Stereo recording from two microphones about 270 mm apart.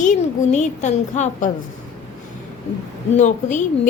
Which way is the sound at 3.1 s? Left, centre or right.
Left.